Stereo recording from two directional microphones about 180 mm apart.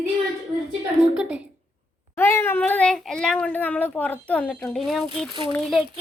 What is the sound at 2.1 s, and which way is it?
A child's voice, 15° left (ahead or behind).